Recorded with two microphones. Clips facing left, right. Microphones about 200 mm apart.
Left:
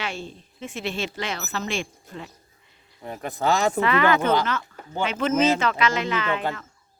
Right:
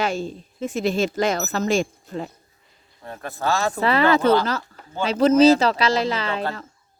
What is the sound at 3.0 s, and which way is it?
Speech, 15° left (ahead or behind).